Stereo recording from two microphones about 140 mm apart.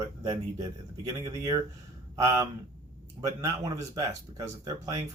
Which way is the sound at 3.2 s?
25° right (ahead or behind).